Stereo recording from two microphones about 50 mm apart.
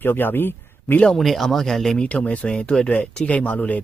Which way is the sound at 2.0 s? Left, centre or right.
Left.